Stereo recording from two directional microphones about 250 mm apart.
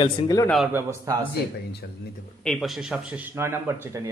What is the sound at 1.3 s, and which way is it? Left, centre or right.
Speech, left.